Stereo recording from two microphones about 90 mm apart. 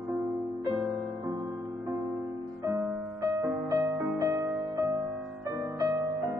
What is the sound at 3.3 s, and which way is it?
Music, 30° right (ahead or behind).